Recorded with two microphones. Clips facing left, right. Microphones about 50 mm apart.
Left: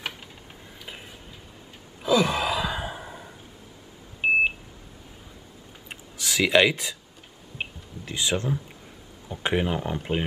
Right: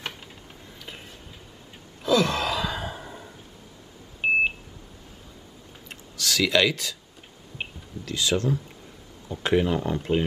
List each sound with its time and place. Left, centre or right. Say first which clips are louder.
2.0 s sigh: even; centre
4.2 s beep: left 1 dB; centre
5.9 s a sound: right 2 dB; centre
8.0 s speech: right 2 dB; left